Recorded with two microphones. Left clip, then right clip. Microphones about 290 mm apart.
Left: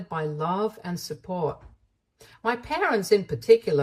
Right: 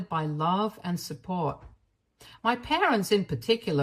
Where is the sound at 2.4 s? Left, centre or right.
Centre.